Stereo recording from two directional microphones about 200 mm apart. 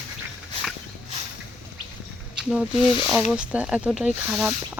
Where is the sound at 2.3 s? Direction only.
5° right (ahead or behind).